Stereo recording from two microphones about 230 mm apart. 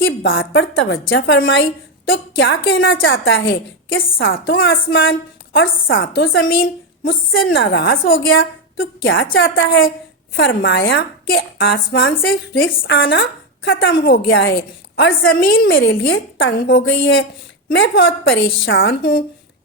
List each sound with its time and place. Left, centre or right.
0.2 s a woman's voice: left
7.5 s speech: left
12.9 s speech: left
15.5 s a woman's voice: left